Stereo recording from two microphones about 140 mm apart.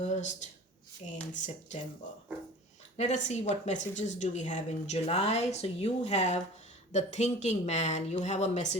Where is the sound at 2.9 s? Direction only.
55° left (ahead or behind).